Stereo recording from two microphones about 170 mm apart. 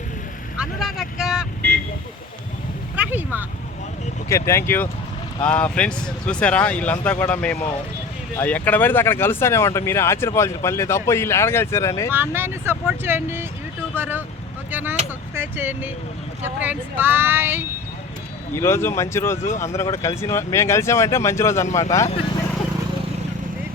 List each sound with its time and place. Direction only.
0.5 s vehicle: 5° right (ahead or behind)
2.9 s a sound: 10° right (ahead or behind)
4.3 s speech: 15° left (ahead or behind)
12.1 s speech: 15° right (ahead or behind)
18.5 s speech: 15° left (ahead or behind)